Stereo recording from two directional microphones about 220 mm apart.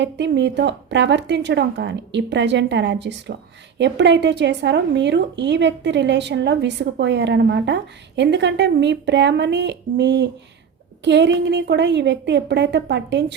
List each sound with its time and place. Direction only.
0.0 s speech: 50° right (ahead or behind)